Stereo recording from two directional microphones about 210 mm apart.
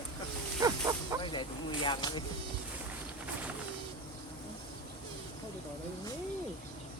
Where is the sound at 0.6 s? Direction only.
15° right (ahead or behind).